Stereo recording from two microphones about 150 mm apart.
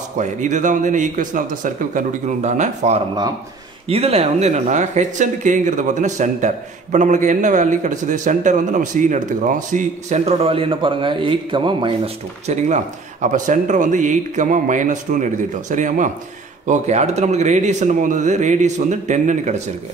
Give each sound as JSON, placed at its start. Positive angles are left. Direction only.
{"t": 0.2, "sound": "speech", "side_deg": -55}
{"t": 12.4, "sound": "speech", "side_deg": -50}